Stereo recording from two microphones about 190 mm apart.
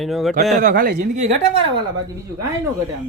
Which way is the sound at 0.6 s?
50° right (ahead or behind).